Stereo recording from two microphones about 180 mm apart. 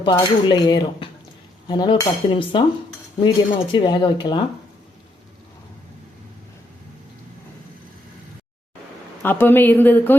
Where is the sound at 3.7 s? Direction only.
25° left (ahead or behind).